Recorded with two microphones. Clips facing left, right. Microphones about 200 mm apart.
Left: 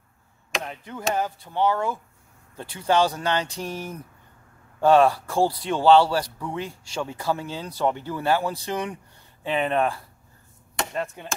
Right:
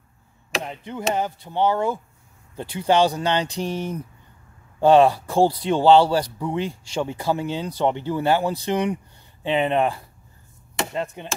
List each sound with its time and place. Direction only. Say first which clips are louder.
0.7 s speech: right 3 dB; 20° right (ahead or behind)